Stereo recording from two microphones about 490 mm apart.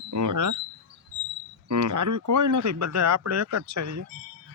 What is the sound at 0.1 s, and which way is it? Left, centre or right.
Speech, right.